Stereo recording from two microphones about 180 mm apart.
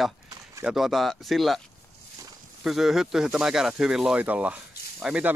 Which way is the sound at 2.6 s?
Centre (ahead or behind).